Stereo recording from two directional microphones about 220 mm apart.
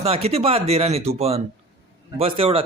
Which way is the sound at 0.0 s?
25° right (ahead or behind).